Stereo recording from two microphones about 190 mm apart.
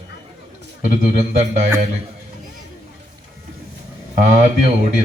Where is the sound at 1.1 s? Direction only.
40° right (ahead or behind).